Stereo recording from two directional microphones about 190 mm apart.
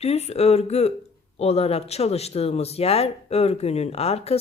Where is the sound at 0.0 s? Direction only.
35° left (ahead or behind).